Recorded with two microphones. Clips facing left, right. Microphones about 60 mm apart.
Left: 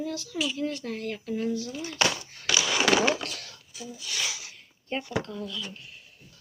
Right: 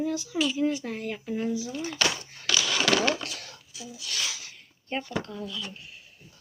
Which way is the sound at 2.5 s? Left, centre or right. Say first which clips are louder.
Left 1 dB; centre.